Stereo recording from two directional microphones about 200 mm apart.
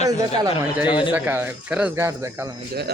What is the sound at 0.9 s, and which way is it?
Speech, 25° left (ahead or behind).